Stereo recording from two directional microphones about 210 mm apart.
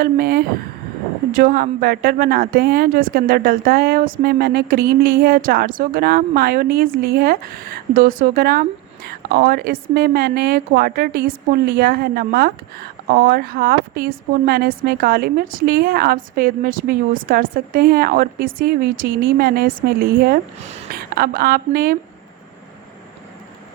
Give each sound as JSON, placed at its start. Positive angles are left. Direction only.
{"t": 0.0, "sound": "speech", "side_deg": -45}